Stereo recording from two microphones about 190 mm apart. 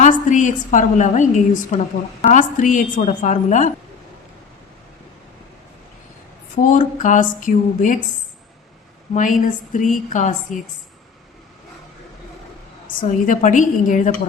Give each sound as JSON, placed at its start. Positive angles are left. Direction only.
{"t": 0.0, "sound": "a woman's voice", "side_deg": 40}
{"t": 6.6, "sound": "a woman's voice", "side_deg": 40}
{"t": 9.1, "sound": "a woman's voice", "side_deg": 40}
{"t": 13.0, "sound": "a woman's voice", "side_deg": 45}